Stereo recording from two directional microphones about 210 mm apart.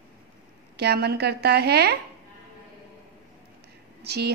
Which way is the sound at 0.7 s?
50° right (ahead or behind).